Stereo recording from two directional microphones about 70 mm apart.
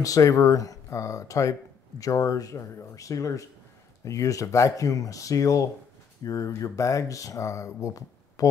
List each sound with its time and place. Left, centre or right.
0.0 s speech: left